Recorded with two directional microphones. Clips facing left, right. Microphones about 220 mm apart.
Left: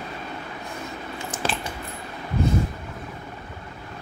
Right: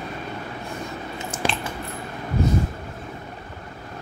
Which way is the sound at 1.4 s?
10° right (ahead or behind).